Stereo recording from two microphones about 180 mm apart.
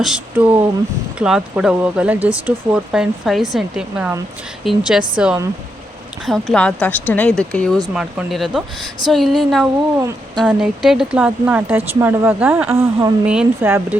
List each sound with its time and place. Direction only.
0.0 s speech: 5° right (ahead or behind)
10.0 s speech: 15° right (ahead or behind)
10.6 s speech: centre (ahead or behind)